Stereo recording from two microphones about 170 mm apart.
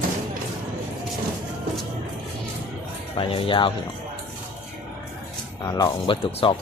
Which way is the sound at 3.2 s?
30° left (ahead or behind).